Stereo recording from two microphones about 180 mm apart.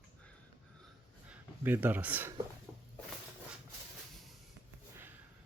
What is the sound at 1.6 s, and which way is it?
Speech, 10° right (ahead or behind).